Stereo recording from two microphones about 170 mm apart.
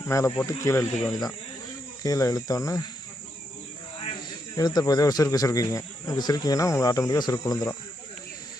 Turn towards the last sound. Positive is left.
turn(degrees=20)  # may be behind; listen again after turning